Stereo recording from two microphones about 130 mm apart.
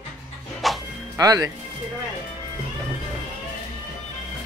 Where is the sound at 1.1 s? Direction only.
25° right (ahead or behind).